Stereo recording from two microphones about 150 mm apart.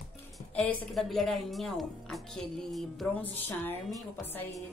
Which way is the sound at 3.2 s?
15° left (ahead or behind).